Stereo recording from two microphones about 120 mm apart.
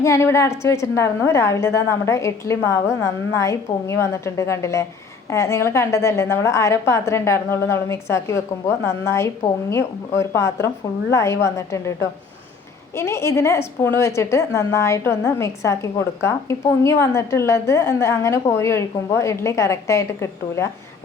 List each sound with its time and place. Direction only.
0.0 s a woman's voice: 25° left (ahead or behind)
13.0 s a woman's voice: 20° left (ahead or behind)